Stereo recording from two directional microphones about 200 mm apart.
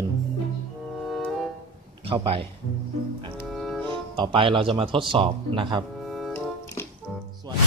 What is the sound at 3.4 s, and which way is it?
Cello, centre (ahead or behind).